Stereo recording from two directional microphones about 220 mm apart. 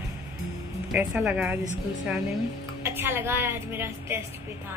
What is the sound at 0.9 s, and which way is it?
Speech, 5° right (ahead or behind).